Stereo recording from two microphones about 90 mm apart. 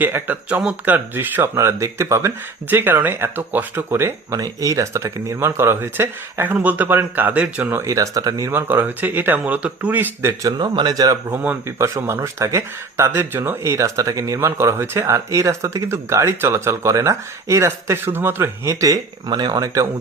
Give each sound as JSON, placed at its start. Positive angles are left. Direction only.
{"t": 0.0, "sound": "speech", "side_deg": -20}
{"t": 4.3, "sound": "speech", "side_deg": -40}
{"t": 7.8, "sound": "speech", "side_deg": -40}
{"t": 8.4, "sound": "speech", "side_deg": -25}
{"t": 10.4, "sound": "speech", "side_deg": -55}
{"t": 11.8, "sound": "speech", "side_deg": -30}
{"t": 19.3, "sound": "speech", "side_deg": -50}